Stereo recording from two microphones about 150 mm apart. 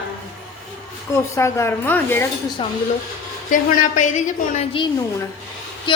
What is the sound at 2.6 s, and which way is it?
Speech, 35° left (ahead or behind).